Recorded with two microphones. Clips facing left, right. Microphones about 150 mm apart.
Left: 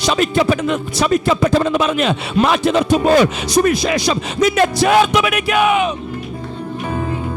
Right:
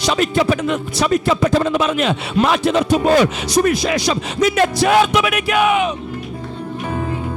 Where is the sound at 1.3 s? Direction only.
20° left (ahead or behind).